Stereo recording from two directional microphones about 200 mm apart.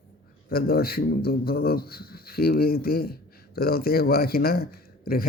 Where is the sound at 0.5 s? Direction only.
50° left (ahead or behind).